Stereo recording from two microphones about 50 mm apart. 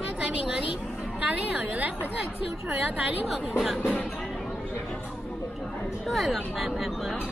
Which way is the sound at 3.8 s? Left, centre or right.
Left.